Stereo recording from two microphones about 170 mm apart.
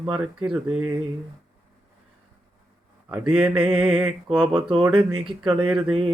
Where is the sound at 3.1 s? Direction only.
5° right (ahead or behind).